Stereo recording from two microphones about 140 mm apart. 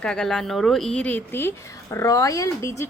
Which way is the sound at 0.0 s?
5° left (ahead or behind).